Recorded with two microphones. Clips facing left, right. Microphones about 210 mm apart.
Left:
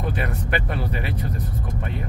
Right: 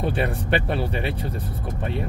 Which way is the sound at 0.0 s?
30° right (ahead or behind).